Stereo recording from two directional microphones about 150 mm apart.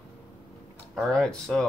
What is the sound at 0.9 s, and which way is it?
Speech, 5° left (ahead or behind).